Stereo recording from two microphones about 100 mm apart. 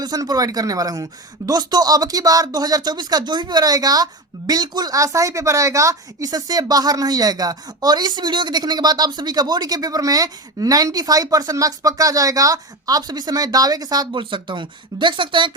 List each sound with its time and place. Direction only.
0.0 s speech: 40° right (ahead or behind)